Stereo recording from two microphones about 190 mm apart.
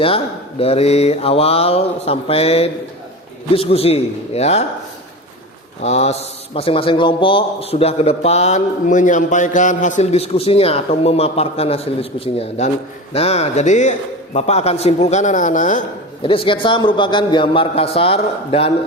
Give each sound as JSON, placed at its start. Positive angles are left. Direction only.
{"t": 0.6, "sound": "a man's voice", "side_deg": 30}
{"t": 5.8, "sound": "a man's voice", "side_deg": 35}
{"t": 16.2, "sound": "a man's voice", "side_deg": 25}